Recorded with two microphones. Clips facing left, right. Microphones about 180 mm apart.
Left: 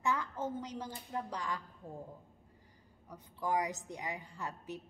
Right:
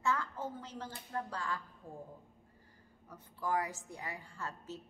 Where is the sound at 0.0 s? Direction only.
15° left (ahead or behind).